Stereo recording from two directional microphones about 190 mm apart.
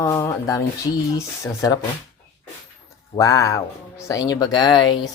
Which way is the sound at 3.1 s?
15° left (ahead or behind).